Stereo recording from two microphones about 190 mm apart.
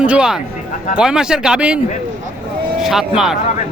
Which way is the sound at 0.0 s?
5° right (ahead or behind).